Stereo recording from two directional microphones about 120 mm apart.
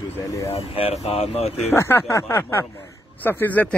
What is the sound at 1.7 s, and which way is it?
Speech, 20° left (ahead or behind).